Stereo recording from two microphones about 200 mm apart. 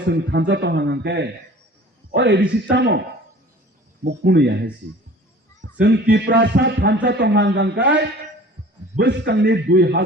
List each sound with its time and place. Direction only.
0.1 s a man's voice: 60° right (ahead or behind)
4.0 s a man's voice: 55° right (ahead or behind)
5.8 s a man's voice: 60° right (ahead or behind)